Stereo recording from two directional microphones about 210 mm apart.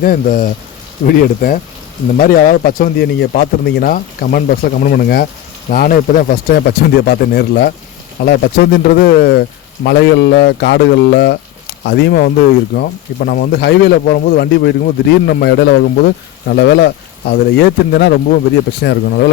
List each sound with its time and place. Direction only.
0.0 s speech: 40° left (ahead or behind)